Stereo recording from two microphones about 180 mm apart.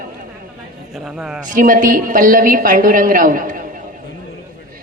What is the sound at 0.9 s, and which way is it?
Speech, 5° right (ahead or behind).